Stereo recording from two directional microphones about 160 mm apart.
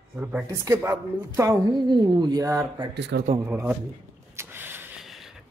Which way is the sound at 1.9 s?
30° right (ahead or behind).